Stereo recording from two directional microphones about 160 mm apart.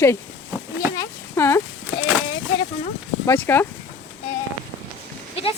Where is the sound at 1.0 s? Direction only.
15° left (ahead or behind).